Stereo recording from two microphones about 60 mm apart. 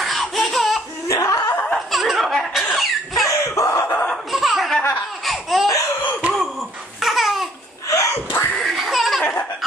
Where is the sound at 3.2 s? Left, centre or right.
Left.